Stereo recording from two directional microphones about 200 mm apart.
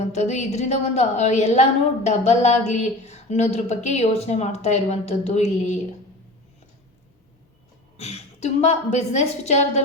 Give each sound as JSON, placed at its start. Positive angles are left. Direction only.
{"t": 0.0, "sound": "a woman's voice", "side_deg": 35}
{"t": 7.9, "sound": "a woman's voice", "side_deg": 35}